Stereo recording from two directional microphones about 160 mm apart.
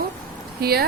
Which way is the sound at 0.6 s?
80° right.